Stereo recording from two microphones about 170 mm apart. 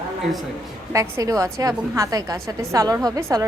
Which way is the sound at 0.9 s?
20° right (ahead or behind).